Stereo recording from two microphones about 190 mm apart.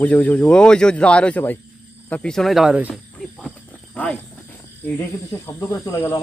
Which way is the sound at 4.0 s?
5° left (ahead or behind).